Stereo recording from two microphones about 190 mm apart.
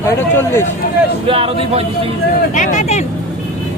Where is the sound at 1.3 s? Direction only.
30° right (ahead or behind).